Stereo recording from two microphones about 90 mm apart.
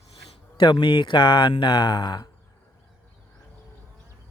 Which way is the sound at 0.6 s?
55° left (ahead or behind).